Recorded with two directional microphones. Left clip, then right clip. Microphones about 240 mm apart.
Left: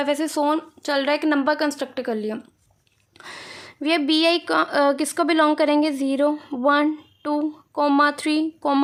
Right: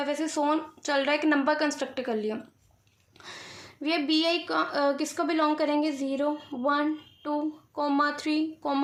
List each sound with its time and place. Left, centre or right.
0.0 s a woman's voice: left